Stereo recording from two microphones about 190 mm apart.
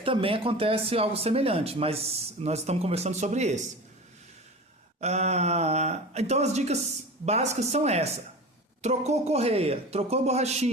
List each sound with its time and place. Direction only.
0.0 s speech: 30° right (ahead or behind)
4.9 s speech: 35° right (ahead or behind)